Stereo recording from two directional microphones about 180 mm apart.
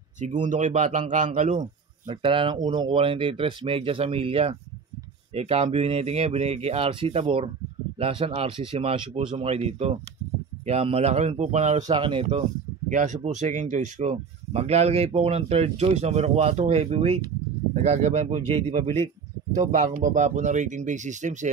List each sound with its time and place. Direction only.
0.5 s speech: 45° right (ahead or behind)
1.6 s speech: 25° right (ahead or behind)
12.9 s speech: 40° right (ahead or behind)